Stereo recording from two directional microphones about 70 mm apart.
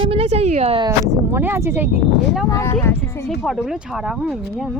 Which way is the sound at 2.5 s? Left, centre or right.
Left.